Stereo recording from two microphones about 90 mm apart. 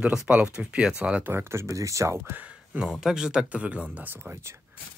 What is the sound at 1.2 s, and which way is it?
Speech, 25° right (ahead or behind).